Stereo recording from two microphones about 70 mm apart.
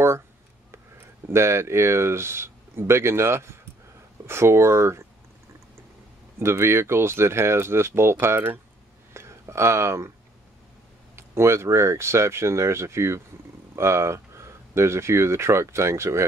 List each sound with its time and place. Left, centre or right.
1.2 s speech: right
6.4 s speech: right
11.1 s speech: right